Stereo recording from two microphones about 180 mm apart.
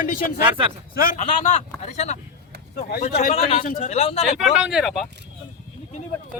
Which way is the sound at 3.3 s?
35° left (ahead or behind).